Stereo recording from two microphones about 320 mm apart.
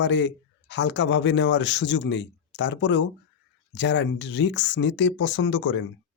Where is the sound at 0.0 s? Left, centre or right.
Left.